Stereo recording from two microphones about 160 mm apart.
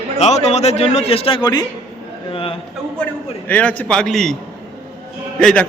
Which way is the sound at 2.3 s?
35° left (ahead or behind).